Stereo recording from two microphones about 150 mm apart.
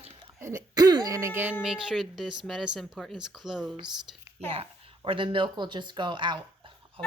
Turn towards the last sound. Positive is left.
turn(degrees=-35)  # may be behind; listen again after turning